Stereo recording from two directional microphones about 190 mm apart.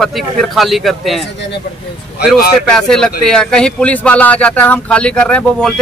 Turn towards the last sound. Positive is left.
turn(degrees=5)  # may be behind; listen again after turning